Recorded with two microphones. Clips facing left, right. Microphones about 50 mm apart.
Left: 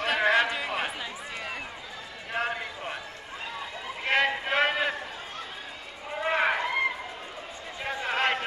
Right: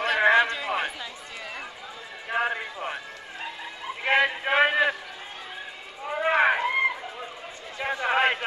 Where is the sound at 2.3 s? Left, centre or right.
Centre.